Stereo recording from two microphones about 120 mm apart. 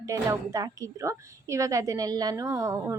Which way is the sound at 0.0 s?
30° right (ahead or behind).